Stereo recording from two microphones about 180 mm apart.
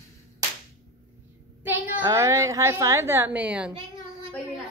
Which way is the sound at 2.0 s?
15° right (ahead or behind).